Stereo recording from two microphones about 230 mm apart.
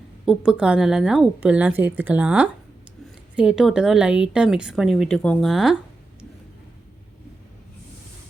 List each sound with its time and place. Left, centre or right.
0.3 s a woman's voice: centre